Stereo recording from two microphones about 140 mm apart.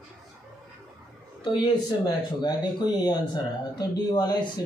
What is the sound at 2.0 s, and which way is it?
Speech, 30° left (ahead or behind).